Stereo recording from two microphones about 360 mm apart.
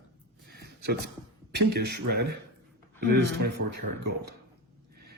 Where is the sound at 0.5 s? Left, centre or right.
Right.